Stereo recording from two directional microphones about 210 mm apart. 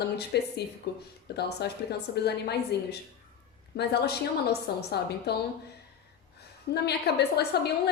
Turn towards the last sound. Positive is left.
turn(degrees=50)  # may be behind; listen again after turning